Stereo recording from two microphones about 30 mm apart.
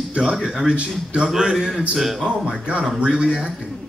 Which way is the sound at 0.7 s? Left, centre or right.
Right.